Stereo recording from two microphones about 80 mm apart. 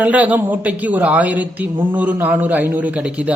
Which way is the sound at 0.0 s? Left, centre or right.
Centre.